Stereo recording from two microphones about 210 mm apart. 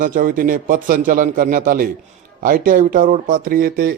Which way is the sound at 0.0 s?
40° right (ahead or behind).